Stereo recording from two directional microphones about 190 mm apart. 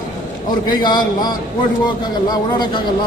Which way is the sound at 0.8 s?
25° left (ahead or behind).